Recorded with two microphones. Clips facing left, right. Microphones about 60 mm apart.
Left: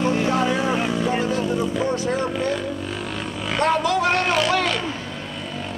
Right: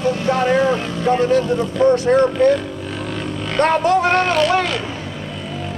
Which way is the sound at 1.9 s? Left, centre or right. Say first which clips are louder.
Right 9 dB; right.